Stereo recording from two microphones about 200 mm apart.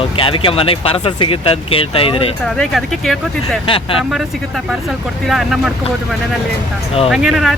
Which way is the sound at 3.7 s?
25° left (ahead or behind).